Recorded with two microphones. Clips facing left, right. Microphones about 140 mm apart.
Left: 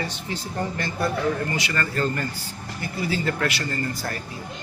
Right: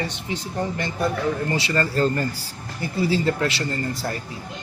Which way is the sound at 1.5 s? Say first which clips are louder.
Right 4 dB; 30° right (ahead or behind).